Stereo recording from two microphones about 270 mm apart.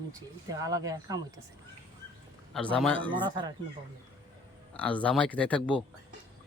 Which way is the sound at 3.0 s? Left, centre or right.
Centre.